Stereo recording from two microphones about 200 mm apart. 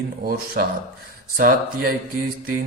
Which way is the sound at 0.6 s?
45° right (ahead or behind).